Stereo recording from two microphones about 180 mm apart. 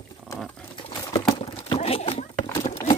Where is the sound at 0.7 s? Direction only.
25° left (ahead or behind).